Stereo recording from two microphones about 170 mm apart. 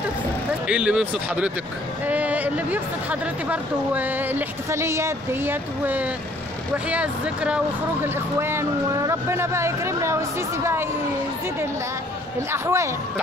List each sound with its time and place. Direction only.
0.7 s speech: 5° right (ahead or behind)
12.4 s speech: 15° right (ahead or behind)